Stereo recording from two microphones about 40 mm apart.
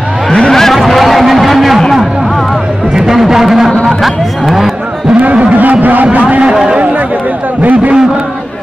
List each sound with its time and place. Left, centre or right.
0.5 s a sound: centre
2.9 s a sound: centre
4.0 s cattle: centre
5.1 s speech: right
6.5 s speech: centre
7.6 s speech: right